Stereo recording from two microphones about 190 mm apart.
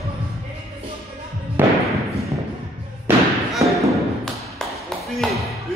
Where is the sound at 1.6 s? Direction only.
10° right (ahead or behind).